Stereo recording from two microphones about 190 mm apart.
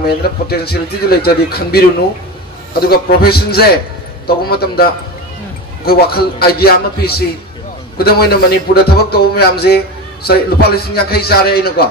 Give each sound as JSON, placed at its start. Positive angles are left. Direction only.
{"t": 0.5, "sound": "a man's voice", "side_deg": 55}
{"t": 5.9, "sound": "a man's voice", "side_deg": 55}